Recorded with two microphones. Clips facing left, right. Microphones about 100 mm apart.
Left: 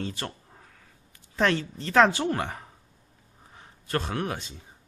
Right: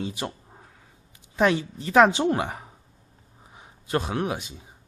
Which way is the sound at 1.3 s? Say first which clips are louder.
Right 3 dB; 15° right (ahead or behind).